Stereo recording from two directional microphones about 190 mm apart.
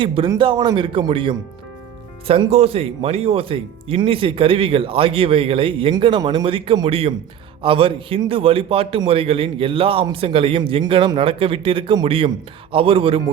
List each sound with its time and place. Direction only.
0.0 s speech: 25° right (ahead or behind)